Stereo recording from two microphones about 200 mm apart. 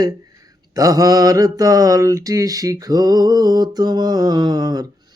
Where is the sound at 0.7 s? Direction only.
15° right (ahead or behind).